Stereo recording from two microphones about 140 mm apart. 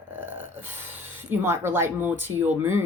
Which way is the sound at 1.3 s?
15° right (ahead or behind).